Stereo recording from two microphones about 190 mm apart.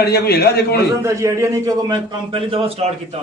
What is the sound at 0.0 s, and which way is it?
Speech, 55° left (ahead or behind).